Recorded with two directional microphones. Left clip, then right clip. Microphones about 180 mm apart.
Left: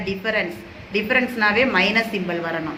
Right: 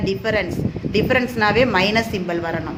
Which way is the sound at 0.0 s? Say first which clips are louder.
Right 2 dB; 45° right (ahead or behind).